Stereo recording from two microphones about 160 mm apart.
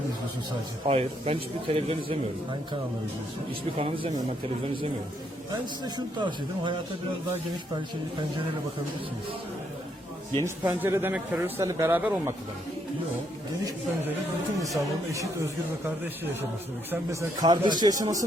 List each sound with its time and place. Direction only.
0.9 s speech: 40° right (ahead or behind)
3.8 s speech: 35° right (ahead or behind)
5.8 s speech: 30° right (ahead or behind)
10.4 s speech: 15° right (ahead or behind)
14.6 s speech: 20° right (ahead or behind)
16.9 s speech: 20° right (ahead or behind)